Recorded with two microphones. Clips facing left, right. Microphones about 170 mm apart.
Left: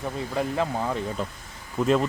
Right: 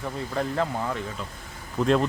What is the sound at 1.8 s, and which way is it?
Speech, 5° left (ahead or behind).